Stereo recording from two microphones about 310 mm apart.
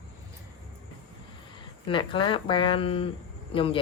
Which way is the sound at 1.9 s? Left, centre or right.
Centre.